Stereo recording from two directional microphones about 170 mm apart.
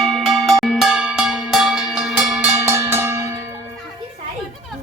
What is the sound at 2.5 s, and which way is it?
Music, 15° right (ahead or behind).